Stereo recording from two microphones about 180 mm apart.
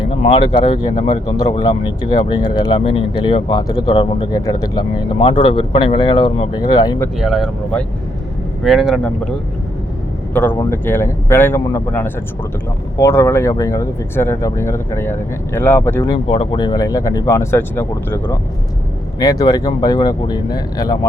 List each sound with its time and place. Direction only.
0.0 s speech: 25° left (ahead or behind)
7.2 s speech: centre (ahead or behind)
10.3 s speech: 10° left (ahead or behind)
16.1 s speech: 30° left (ahead or behind)